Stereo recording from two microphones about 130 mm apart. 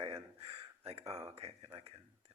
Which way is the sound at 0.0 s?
45° right (ahead or behind).